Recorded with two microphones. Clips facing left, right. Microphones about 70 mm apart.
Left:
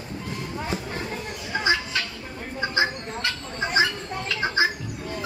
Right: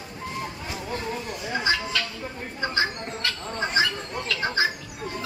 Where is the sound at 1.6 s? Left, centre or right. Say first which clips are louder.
Left 2 dB; centre.